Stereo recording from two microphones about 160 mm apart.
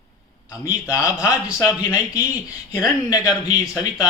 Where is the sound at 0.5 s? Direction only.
20° left (ahead or behind).